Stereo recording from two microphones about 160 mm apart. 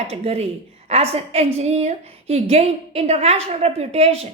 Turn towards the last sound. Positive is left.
turn(degrees=-40)  # may be behind; listen again after turning